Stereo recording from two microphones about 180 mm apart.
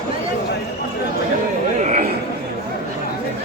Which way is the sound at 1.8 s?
45° right (ahead or behind).